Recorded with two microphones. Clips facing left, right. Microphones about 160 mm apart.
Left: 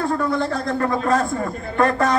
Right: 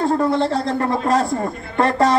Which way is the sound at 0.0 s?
30° right (ahead or behind).